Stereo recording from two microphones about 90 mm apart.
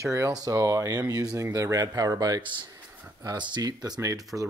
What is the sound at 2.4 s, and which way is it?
Speech, 60° right (ahead or behind).